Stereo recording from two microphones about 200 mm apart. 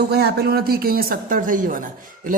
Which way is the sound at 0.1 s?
55° right (ahead or behind).